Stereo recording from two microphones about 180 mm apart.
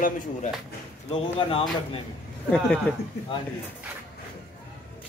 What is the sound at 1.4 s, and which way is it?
Speech, 25° left (ahead or behind).